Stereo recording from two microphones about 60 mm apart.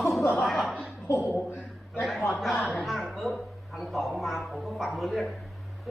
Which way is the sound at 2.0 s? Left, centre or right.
Centre.